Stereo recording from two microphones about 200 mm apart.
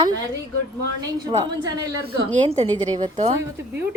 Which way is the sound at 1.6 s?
20° right (ahead or behind).